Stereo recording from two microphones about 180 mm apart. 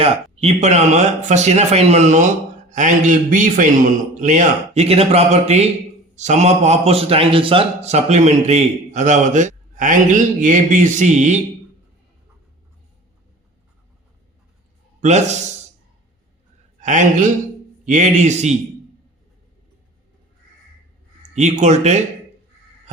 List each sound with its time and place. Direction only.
0.0 s speech: 35° right (ahead or behind)
15.0 s speech: 40° right (ahead or behind)
16.8 s a man's voice: 45° right (ahead or behind)
21.3 s speech: 40° right (ahead or behind)